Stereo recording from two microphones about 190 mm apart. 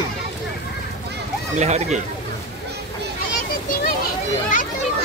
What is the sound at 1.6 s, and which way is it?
Speech, 35° right (ahead or behind).